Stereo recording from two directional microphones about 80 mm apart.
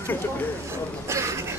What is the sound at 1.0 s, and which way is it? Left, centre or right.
Speech, right.